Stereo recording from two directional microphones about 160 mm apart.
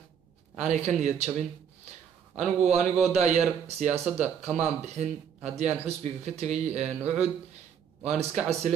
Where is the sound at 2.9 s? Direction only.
45° right (ahead or behind).